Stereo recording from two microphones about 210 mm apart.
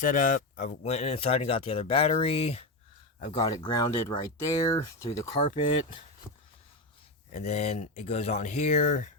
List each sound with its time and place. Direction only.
0.0 s speech: 40° left (ahead or behind)
3.4 s speech: 20° left (ahead or behind)
5.3 s speech: 30° left (ahead or behind)
7.3 s speech: 30° left (ahead or behind)